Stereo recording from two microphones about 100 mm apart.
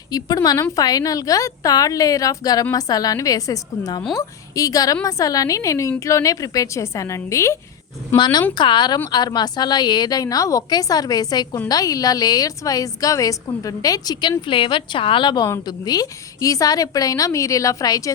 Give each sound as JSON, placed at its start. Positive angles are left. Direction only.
{"t": 0.1, "sound": "a woman's voice", "side_deg": 40}
{"t": 8.1, "sound": "a woman's voice", "side_deg": 45}